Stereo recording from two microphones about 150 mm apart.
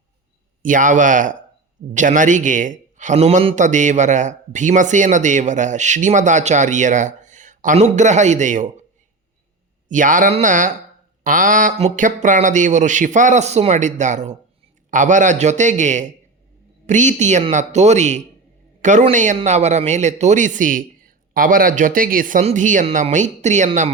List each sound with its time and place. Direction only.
0.6 s a man's voice: 60° right (ahead or behind)
9.9 s a man's voice: 60° right (ahead or behind)